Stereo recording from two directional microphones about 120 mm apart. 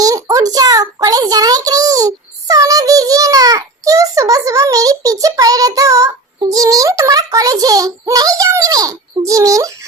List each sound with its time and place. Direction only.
0.0 s a child's voice: 30° right (ahead or behind)